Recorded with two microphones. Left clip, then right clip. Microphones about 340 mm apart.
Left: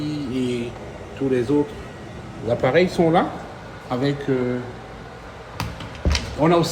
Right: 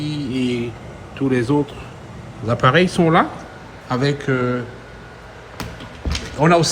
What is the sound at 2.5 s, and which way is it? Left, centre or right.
Speech, right.